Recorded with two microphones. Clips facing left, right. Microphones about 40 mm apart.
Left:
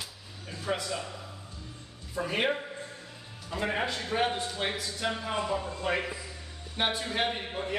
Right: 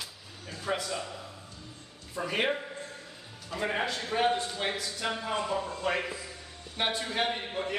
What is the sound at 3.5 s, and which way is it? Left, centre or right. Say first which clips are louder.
Speech: even; centre.